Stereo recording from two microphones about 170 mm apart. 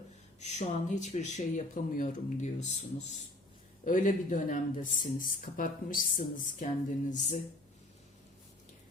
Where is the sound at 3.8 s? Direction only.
50° left (ahead or behind).